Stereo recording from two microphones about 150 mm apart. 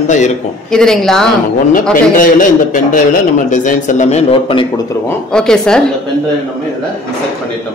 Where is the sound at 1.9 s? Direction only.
65° left (ahead or behind); by 4.6 s 40° left (ahead or behind).